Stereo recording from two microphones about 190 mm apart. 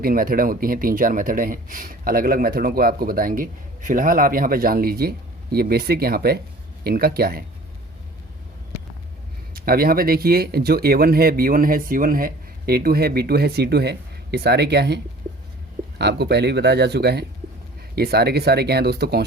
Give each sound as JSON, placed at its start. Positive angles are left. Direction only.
{"t": 0.0, "sound": "speech", "side_deg": -50}
{"t": 9.6, "sound": "speech", "side_deg": -50}